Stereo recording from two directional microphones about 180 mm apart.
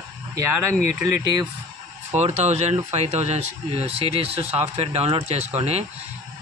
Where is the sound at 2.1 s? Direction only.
40° right (ahead or behind).